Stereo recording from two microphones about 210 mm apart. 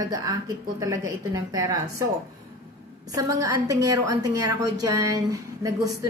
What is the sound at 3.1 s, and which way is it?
A woman's voice, 15° right (ahead or behind).